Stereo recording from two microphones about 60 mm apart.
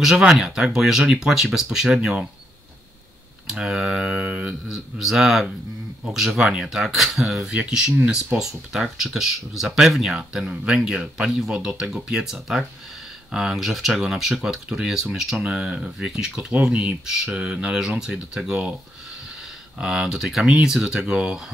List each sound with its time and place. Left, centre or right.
0.0 s speech: centre
2.0 s speech: right
3.4 s speech: centre
4.6 s speech: centre
19.8 s speech: centre